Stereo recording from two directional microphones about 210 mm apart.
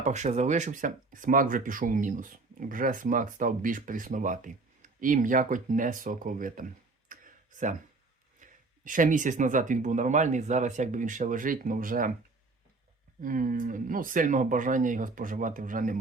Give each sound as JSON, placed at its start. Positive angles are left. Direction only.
{"t": 0.0, "sound": "speech", "side_deg": -35}
{"t": 7.1, "sound": "a sound", "side_deg": -35}
{"t": 8.4, "sound": "speech", "side_deg": -40}
{"t": 13.2, "sound": "speech", "side_deg": -40}